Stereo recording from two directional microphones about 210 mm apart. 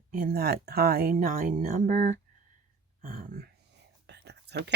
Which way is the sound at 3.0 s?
45° right (ahead or behind).